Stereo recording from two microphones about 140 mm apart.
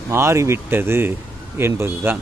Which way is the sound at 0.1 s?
20° right (ahead or behind).